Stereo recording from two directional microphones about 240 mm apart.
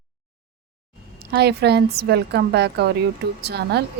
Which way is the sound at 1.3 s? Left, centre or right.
Right.